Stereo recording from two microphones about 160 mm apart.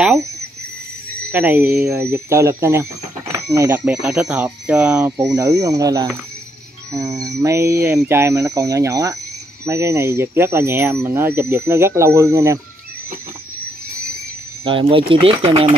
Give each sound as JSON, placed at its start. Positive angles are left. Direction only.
{"t": 1.3, "sound": "speech", "side_deg": -10}
{"t": 14.6, "sound": "speech", "side_deg": -35}